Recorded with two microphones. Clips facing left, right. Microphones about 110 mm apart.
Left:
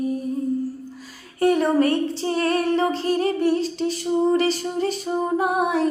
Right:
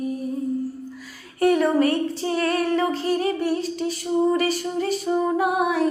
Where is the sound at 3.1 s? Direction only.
35° left (ahead or behind).